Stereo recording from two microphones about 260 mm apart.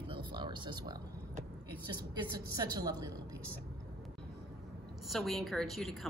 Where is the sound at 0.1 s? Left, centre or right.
Centre.